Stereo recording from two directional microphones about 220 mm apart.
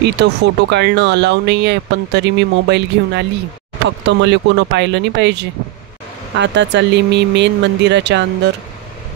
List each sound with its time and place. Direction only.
0.0 s speech: 50° right (ahead or behind)